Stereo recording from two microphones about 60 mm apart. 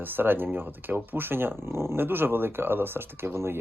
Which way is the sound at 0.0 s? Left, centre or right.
Right.